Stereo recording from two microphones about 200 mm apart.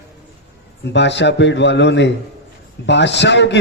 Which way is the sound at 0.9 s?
60° left (ahead or behind).